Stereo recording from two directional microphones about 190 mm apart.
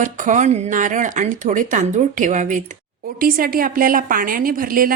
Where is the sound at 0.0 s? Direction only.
40° right (ahead or behind).